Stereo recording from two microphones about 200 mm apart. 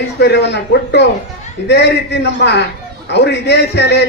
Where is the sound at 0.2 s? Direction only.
60° left (ahead or behind).